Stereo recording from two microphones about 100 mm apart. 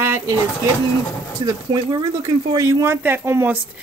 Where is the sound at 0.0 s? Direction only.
25° right (ahead or behind).